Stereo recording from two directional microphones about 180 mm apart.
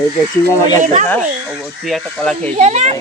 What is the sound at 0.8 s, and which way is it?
Speech, 40° right (ahead or behind).